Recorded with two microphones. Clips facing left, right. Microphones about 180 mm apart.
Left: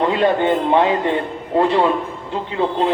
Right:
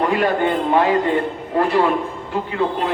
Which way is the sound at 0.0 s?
25° left (ahead or behind).